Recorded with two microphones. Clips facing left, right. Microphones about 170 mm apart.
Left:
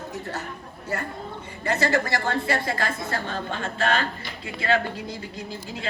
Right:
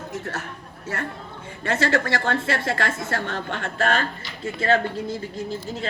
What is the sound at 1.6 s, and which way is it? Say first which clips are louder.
A woman's voice: right 1 dB; 90° right.